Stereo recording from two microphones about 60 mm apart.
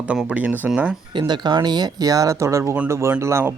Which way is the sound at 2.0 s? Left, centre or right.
Right.